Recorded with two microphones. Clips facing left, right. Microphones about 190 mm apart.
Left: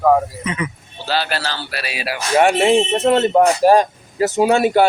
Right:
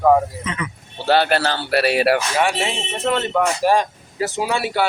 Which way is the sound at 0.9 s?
60° right (ahead or behind).